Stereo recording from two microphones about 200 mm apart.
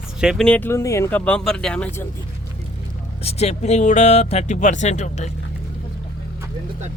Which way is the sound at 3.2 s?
30° left (ahead or behind).